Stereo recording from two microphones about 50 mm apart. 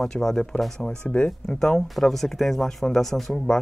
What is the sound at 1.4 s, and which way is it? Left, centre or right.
Speech, centre.